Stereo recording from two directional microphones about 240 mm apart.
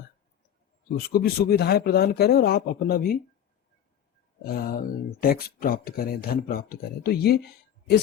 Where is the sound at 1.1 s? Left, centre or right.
Left.